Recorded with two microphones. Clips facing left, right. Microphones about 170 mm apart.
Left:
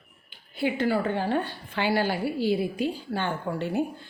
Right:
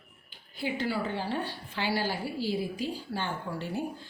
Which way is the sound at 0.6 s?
60° left (ahead or behind).